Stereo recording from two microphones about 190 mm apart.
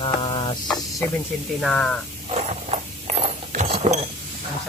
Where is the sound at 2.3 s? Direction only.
35° right (ahead or behind).